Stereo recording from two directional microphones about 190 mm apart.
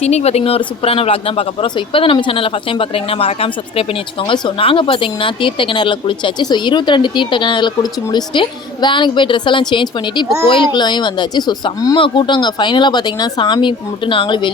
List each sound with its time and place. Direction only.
0.0 s speech: 35° left (ahead or behind)